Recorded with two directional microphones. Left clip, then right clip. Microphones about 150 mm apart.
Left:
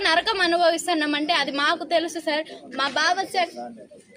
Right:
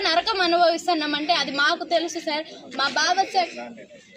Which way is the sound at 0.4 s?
10° left (ahead or behind).